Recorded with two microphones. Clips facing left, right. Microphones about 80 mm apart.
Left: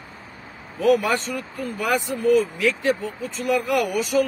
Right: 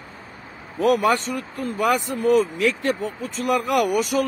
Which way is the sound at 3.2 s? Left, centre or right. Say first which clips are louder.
Even; right.